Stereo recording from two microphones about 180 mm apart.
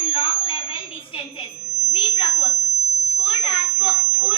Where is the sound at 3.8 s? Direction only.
20° left (ahead or behind).